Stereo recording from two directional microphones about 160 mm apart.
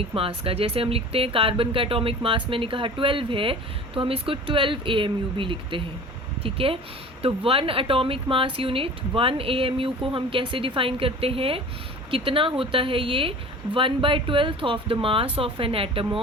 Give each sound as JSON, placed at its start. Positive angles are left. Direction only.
{"t": 0.1, "sound": "speech", "side_deg": -35}